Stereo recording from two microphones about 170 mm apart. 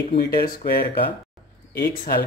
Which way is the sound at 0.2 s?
65° left (ahead or behind).